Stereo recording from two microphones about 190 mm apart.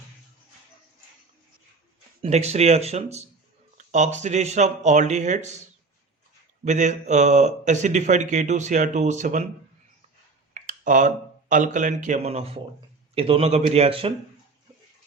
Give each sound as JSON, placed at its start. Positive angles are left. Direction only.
{"t": 2.2, "sound": "a man's voice", "side_deg": -35}
{"t": 6.7, "sound": "a man's voice", "side_deg": -40}
{"t": 10.5, "sound": "a man's voice", "side_deg": -45}